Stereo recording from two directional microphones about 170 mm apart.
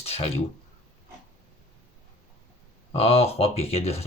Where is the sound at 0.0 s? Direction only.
35° left (ahead or behind).